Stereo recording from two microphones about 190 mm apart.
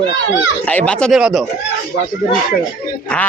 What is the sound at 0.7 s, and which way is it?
Speech, 5° left (ahead or behind).